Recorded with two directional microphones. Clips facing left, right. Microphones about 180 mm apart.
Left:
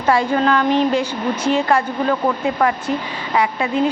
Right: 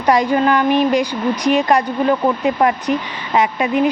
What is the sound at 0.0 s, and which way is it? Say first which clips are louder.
A woman's voice: right 2 dB; 15° right (ahead or behind).